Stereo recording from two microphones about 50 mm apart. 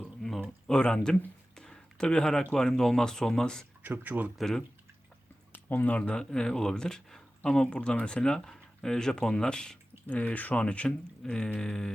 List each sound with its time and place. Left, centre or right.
0.2 s a sound: centre
0.7 s speech: centre
1.5 s a sound: centre
2.6 s speech: centre
3.8 s speech: right
4.4 s speech: centre
5.5 s speech: left
6.1 s speech: centre
10.1 s speech: left